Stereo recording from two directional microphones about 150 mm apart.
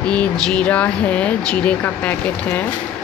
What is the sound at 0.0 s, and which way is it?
Speech, 5° left (ahead or behind).